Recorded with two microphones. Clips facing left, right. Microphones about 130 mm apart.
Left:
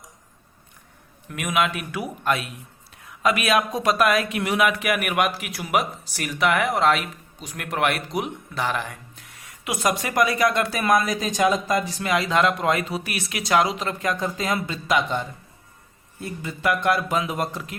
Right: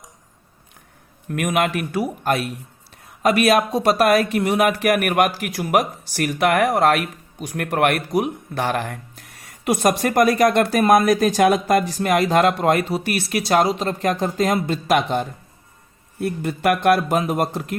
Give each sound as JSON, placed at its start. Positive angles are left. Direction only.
{"t": 1.3, "sound": "speech", "side_deg": -50}
{"t": 1.9, "sound": "speech", "side_deg": -40}
{"t": 12.0, "sound": "speech", "side_deg": -50}
{"t": 12.9, "sound": "speech", "side_deg": -40}
{"t": 14.0, "sound": "speech", "side_deg": -55}